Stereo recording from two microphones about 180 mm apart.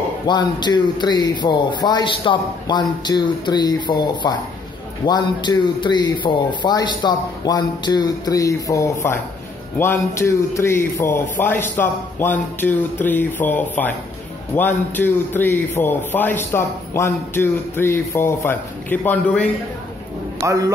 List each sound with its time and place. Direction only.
0.3 s a man's voice: 25° left (ahead or behind); by 19.5 s 5° left (ahead or behind)
20.3 s a man's voice: 20° right (ahead or behind)